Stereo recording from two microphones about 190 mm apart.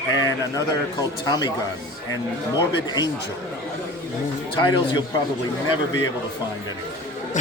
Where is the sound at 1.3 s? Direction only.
20° left (ahead or behind).